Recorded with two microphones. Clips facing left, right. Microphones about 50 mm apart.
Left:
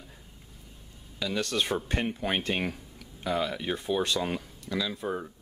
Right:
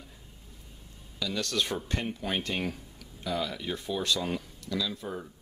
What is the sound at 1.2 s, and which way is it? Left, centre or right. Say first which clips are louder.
Speech: left 2 dB; left.